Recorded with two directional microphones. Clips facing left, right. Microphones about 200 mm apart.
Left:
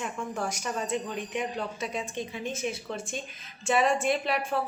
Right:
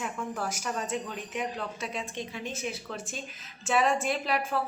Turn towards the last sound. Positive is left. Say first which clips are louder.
# left 2 dB
turn(degrees=0)  # may be behind; listen again after turning